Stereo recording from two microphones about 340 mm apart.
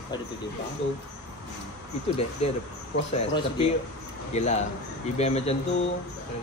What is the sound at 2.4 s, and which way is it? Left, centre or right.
A man's voice, centre.